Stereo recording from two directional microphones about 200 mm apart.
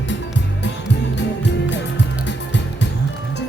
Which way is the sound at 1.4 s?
60° left (ahead or behind).